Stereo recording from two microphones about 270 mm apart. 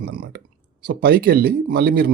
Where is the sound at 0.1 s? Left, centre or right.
Right.